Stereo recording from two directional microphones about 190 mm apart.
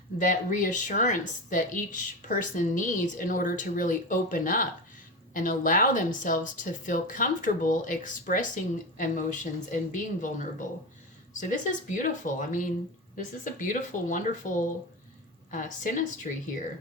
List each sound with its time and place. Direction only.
0.2 s a woman's voice: 45° left (ahead or behind)